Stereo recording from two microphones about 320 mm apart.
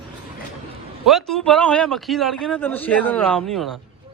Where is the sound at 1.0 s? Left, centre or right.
Centre.